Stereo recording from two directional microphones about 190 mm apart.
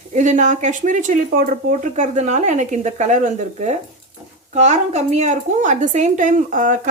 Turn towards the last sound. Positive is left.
turn(degrees=-45)  # may be behind; listen again after turning